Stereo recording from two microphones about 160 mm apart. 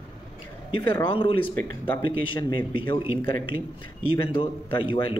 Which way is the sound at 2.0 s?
30° left (ahead or behind).